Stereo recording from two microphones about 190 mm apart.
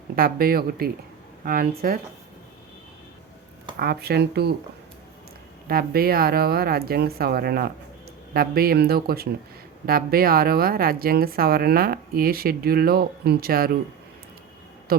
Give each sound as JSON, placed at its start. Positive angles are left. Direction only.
{"t": 0.2, "sound": "speech", "side_deg": -50}
{"t": 3.8, "sound": "speech", "side_deg": -55}
{"t": 5.6, "sound": "speech", "side_deg": -50}
{"t": 14.9, "sound": "speech", "side_deg": -50}